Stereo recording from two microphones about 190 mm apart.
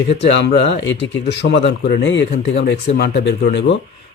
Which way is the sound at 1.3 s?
65° left (ahead or behind).